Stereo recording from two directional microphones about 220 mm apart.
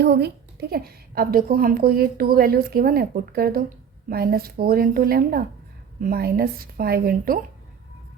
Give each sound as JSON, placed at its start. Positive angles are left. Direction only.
{"t": 0.0, "sound": "a woman's voice", "side_deg": -50}